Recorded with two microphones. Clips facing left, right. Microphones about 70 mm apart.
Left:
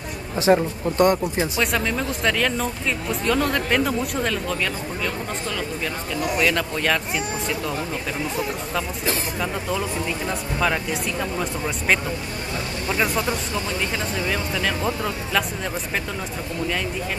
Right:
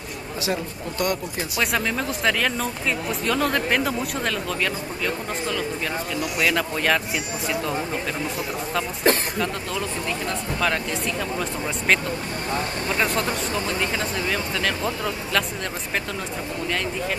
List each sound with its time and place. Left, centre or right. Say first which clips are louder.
0.4 s speech: left 10 dB; left
1.6 s speech: right 2 dB; centre
6.3 s speech: left 1 dB; centre
9.4 s speech: left 1 dB; centre